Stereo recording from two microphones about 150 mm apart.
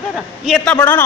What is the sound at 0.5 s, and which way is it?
Speech, 10° left (ahead or behind).